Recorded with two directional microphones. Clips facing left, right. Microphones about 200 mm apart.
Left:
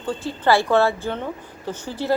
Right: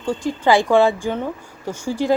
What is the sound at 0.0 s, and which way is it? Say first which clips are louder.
Speech: right 3 dB; 10° right (ahead or behind).